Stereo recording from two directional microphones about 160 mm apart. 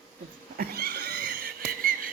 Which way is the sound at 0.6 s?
75° right (ahead or behind).